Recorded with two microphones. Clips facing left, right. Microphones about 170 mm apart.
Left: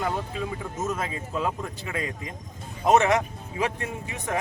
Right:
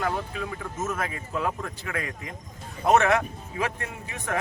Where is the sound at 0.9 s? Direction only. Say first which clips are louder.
Left 2 dB; 20° left (ahead or behind).